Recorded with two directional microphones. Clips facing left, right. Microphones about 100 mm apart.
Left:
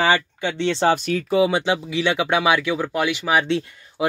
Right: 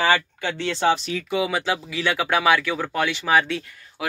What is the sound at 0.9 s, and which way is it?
Speech, 45° left (ahead or behind).